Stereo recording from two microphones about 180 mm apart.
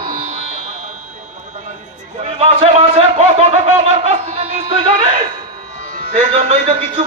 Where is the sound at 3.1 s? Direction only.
35° right (ahead or behind).